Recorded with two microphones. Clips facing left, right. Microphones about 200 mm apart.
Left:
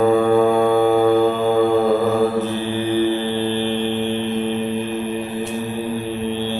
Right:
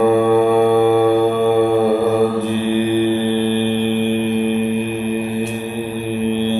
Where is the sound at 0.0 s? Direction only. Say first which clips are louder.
Right 2 dB; 15° right (ahead or behind).